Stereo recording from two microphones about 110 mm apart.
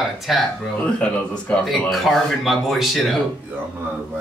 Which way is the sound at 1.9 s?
Centre (ahead or behind).